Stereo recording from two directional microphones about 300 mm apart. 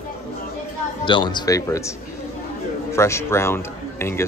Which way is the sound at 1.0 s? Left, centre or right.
Centre.